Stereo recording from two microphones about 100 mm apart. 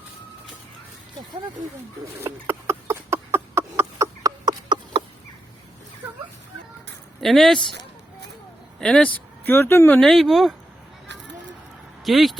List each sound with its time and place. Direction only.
2.2 s a sound: 25° right (ahead or behind)
7.2 s speech: 5° left (ahead or behind)
8.8 s speech: 5° left (ahead or behind)
9.4 s speech: 20° left (ahead or behind)
10.0 s speech: 5° left (ahead or behind)
12.0 s speech: centre (ahead or behind)